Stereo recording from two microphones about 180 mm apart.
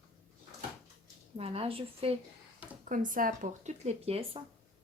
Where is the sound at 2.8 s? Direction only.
50° right (ahead or behind).